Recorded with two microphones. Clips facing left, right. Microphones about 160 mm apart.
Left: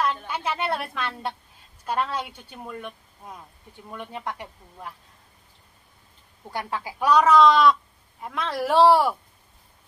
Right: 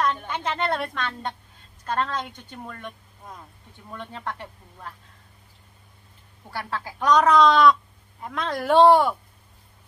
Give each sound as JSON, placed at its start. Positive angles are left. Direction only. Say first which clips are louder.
{"t": 0.0, "sound": "a woman's voice", "louder": "right 1 dB", "side_deg": 10}
{"t": 6.5, "sound": "a woman's voice", "louder": "left 1 dB", "side_deg": 15}